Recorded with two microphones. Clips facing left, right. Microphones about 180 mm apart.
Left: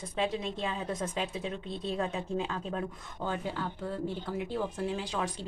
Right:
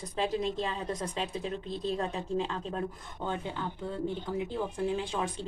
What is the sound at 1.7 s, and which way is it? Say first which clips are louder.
Speech: right 2 dB; centre (ahead or behind).